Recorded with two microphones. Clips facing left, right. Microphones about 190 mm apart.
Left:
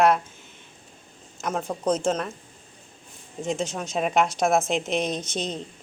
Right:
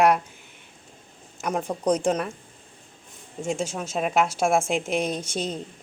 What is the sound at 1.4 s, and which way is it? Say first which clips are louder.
Speech: right 1 dB; 15° right (ahead or behind).